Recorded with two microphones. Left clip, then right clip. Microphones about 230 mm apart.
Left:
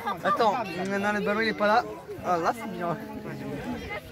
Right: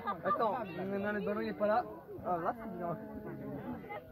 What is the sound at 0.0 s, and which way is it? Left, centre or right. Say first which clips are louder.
Speech: left 9 dB; left.